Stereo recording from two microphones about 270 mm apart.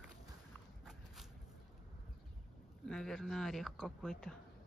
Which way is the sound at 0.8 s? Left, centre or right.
Centre.